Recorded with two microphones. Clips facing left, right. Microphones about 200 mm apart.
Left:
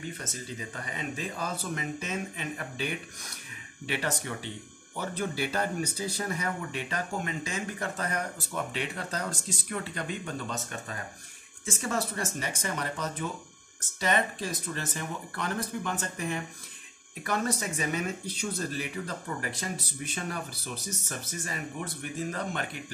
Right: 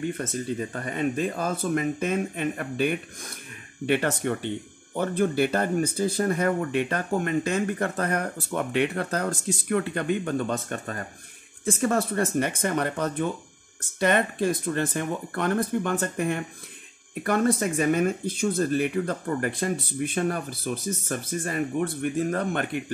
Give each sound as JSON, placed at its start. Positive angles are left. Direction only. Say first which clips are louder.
{"t": 0.2, "sound": "speech", "louder": "right 10 dB", "side_deg": -55}